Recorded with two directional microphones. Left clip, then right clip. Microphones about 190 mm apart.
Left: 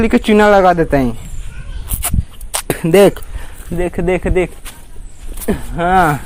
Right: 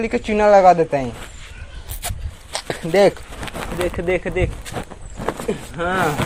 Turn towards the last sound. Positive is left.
turn(degrees=50)  # may be behind; listen again after turning